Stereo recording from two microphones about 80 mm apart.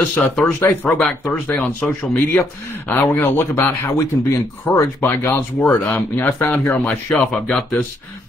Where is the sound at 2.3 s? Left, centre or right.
Left.